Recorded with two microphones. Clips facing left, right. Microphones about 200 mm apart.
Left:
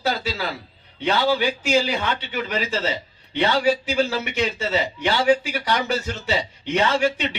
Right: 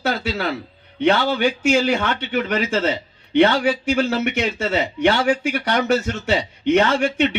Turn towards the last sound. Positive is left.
turn(degrees=-55)  # may be behind; listen again after turning